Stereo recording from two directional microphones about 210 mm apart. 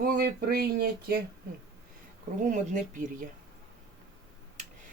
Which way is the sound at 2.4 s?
35° right (ahead or behind).